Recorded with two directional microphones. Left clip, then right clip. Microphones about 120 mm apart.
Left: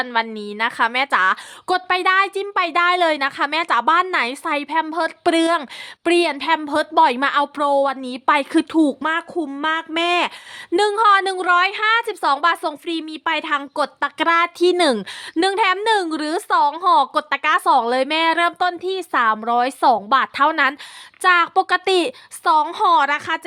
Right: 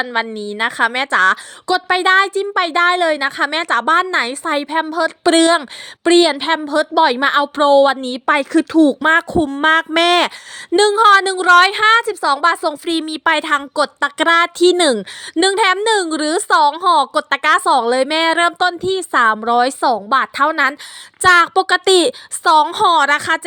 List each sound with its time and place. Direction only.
0.0 s a woman's voice: 30° right (ahead or behind); by 6.3 s 50° right (ahead or behind)
6.3 s a woman's voice: 30° right (ahead or behind); by 8.2 s 50° right (ahead or behind)
8.3 s a woman's voice: 35° right (ahead or behind)
9.0 s speech: 75° right (ahead or behind)
9.5 s speech: 60° right (ahead or behind)
10.8 s a woman's voice: 40° right (ahead or behind)
12.0 s a woman's voice: 35° right (ahead or behind)
12.8 s speech: 85° right; by 13.6 s 50° right (ahead or behind)
13.6 s a woman's voice: 35° right (ahead or behind)
16.8 s a woman's voice: 35° right (ahead or behind)
19.8 s a woman's voice: 25° right (ahead or behind)
21.2 s a woman's voice: 40° right (ahead or behind)